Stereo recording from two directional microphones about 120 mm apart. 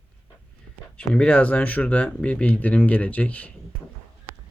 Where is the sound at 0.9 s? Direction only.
10° left (ahead or behind).